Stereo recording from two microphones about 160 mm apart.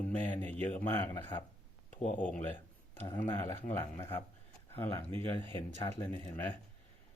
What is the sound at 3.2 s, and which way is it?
A man's voice, 15° left (ahead or behind).